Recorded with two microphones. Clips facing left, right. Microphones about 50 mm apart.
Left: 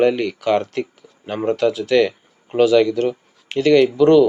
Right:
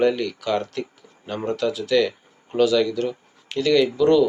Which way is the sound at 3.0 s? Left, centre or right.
Left.